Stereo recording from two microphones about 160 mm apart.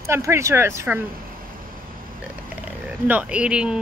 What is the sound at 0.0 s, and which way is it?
Speech, 15° right (ahead or behind).